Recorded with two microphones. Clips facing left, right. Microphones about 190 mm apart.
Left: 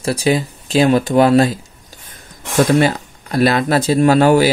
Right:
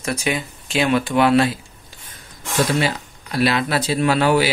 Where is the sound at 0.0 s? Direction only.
35° left (ahead or behind).